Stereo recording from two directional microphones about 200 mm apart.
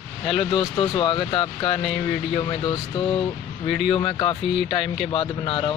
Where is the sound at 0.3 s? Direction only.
25° left (ahead or behind).